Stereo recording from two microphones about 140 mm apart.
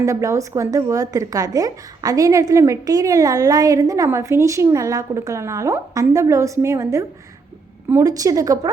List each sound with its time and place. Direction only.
0.0 s a woman's voice: 25° right (ahead or behind)